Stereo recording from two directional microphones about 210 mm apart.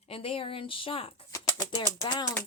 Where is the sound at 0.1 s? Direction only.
25° left (ahead or behind).